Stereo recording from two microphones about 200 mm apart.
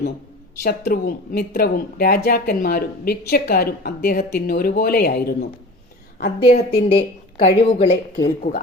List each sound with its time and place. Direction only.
0.6 s a woman's voice: 50° left (ahead or behind)
6.9 s speech: 30° left (ahead or behind)
8.4 s a woman's voice: 45° left (ahead or behind)